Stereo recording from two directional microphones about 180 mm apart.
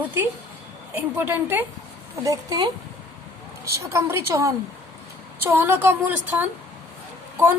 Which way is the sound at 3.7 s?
15° right (ahead or behind).